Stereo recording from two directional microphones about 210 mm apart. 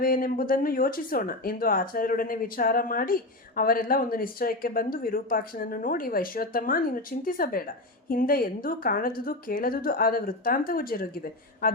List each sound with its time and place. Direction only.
0.0 s speech: 45° left (ahead or behind)